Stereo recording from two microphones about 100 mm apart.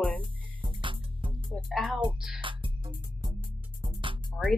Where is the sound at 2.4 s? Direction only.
55° right (ahead or behind).